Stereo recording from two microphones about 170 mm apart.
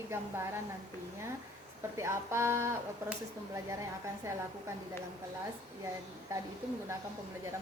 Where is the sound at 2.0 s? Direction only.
15° right (ahead or behind).